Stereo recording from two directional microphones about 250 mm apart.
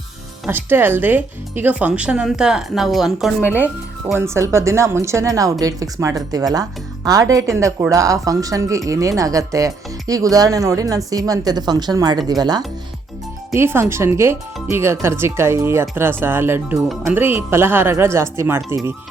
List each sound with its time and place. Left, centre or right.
0.4 s speech: centre